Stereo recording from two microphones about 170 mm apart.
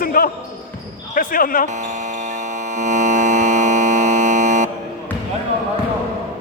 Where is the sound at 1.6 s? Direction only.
45° right (ahead or behind).